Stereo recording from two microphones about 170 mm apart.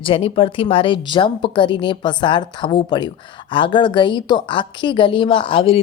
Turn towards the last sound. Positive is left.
turn(degrees=30)  # may be behind; listen again after turning